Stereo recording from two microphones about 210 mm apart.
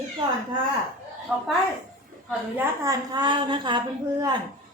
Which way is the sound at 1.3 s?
Centre (ahead or behind).